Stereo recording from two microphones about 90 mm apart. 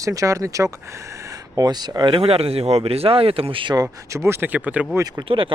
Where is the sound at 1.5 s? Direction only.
50° right (ahead or behind).